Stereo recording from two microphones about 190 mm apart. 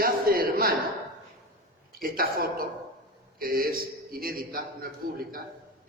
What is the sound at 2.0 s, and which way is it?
A man's voice, 50° right (ahead or behind).